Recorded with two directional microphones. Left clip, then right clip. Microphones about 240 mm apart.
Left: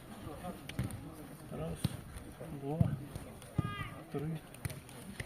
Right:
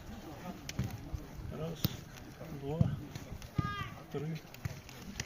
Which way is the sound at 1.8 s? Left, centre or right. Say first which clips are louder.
Right 3 dB; right.